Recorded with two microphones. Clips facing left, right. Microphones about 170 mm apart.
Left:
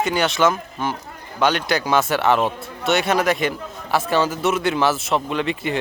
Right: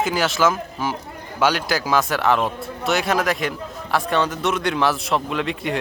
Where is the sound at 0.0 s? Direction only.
Centre (ahead or behind).